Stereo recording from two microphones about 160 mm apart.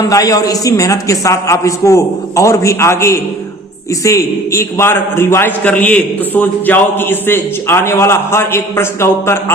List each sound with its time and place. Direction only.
0.0 s a man's voice: 20° left (ahead or behind)